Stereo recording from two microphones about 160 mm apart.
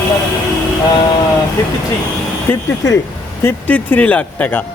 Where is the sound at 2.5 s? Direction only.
20° left (ahead or behind).